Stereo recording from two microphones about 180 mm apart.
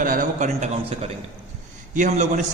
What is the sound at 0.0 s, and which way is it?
A man's voice, 50° right (ahead or behind).